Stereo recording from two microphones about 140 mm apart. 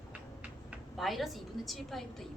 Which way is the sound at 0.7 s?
Centre (ahead or behind).